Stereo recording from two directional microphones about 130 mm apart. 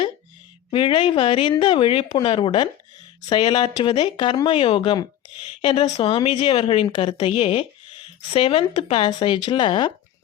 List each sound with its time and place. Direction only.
0.7 s speech: 40° left (ahead or behind)
7.1 s speech: 50° left (ahead or behind); by 9.9 s 35° left (ahead or behind)